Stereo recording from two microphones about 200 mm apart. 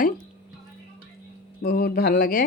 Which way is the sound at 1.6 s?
50° left (ahead or behind).